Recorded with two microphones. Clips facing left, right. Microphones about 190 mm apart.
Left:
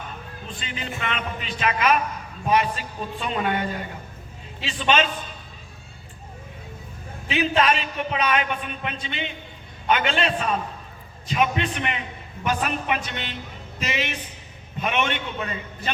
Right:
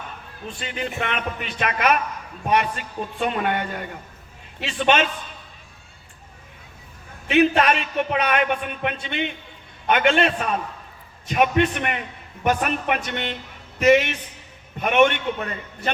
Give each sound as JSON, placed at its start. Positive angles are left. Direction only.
{"t": 0.6, "sound": "speech", "side_deg": -60}
{"t": 3.2, "sound": "speech", "side_deg": -60}
{"t": 7.3, "sound": "a man's voice", "side_deg": -55}